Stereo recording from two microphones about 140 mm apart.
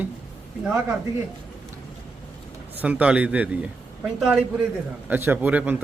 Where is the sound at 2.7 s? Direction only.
10° right (ahead or behind).